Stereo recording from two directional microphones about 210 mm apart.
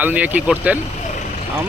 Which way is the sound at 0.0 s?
10° right (ahead or behind).